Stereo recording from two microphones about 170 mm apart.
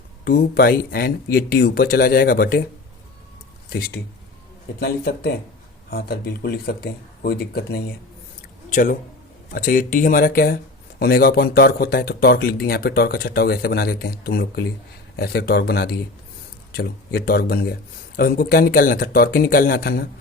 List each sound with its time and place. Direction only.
0.3 s speech: 65° left (ahead or behind)
3.7 s speech: 60° left (ahead or behind)
8.7 s speech: 50° left (ahead or behind)